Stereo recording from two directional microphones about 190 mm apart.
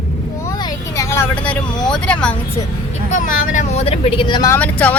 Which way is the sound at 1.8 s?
5° left (ahead or behind).